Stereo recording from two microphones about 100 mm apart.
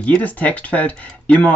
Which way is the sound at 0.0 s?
15° left (ahead or behind).